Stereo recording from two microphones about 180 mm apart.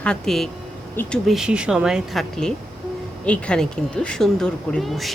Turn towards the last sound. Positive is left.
turn(degrees=0)  # may be behind; listen again after turning